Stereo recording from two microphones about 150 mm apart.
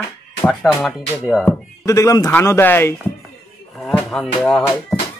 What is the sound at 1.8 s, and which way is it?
A man's voice, 20° left (ahead or behind).